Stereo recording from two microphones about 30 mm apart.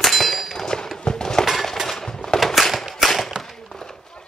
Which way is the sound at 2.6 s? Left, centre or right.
Centre.